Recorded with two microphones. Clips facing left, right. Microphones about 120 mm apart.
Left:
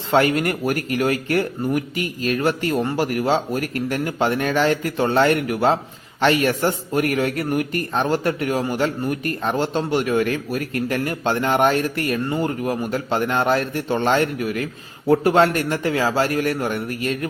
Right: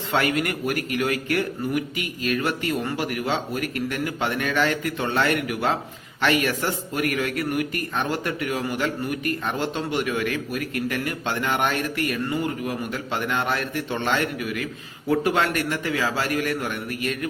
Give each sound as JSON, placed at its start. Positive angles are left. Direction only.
{"t": 0.1, "sound": "a man's voice", "side_deg": 35}